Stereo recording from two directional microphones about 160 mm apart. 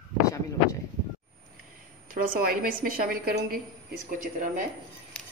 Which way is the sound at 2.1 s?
60° right (ahead or behind).